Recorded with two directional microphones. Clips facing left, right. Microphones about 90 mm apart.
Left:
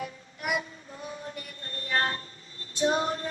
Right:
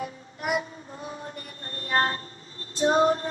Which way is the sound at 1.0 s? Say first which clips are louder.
Even; 40° right (ahead or behind).